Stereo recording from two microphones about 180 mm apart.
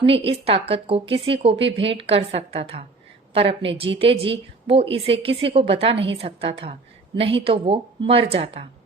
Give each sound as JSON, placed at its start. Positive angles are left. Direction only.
{"t": 0.0, "sound": "a woman's voice", "side_deg": -30}